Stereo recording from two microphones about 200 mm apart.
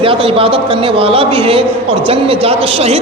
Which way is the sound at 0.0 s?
25° right (ahead or behind).